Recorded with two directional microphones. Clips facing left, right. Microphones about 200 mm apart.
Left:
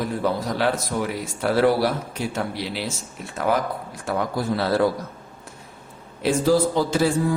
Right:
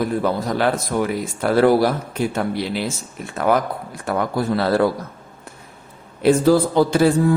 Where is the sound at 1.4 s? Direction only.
50° right (ahead or behind).